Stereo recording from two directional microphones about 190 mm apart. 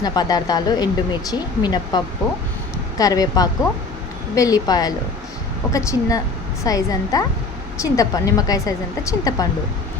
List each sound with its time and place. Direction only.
0.0 s a woman's voice: 20° left (ahead or behind)
3.0 s a woman's voice: 20° left (ahead or behind)